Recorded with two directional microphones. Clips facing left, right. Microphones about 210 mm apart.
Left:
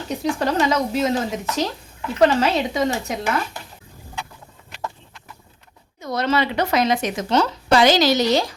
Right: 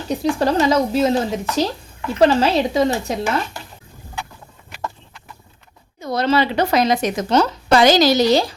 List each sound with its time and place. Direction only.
0.2 s speech: 35° right (ahead or behind)
6.0 s speech: 30° right (ahead or behind)